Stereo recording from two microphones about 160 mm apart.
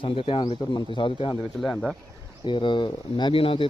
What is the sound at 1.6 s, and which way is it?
Speech, centre (ahead or behind).